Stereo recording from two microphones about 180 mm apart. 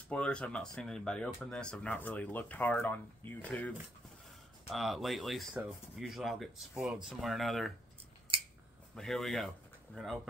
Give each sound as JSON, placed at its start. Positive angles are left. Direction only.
{"t": 0.1, "sound": "speech", "side_deg": 5}
{"t": 8.9, "sound": "speech", "side_deg": 0}